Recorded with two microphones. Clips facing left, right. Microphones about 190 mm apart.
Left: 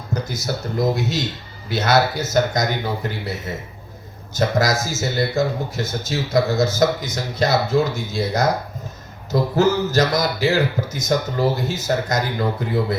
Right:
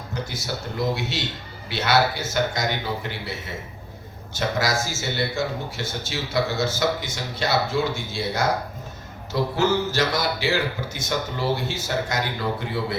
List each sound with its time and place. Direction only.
0.4 s speech: 40° left (ahead or behind)
4.4 s speech: 40° left (ahead or behind)